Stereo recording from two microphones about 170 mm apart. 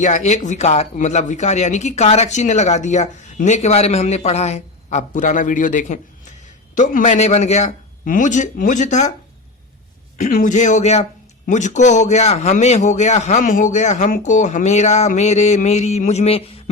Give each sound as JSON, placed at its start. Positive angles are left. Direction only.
{"t": 0.0, "sound": "speech", "side_deg": 45}
{"t": 10.2, "sound": "speech", "side_deg": 50}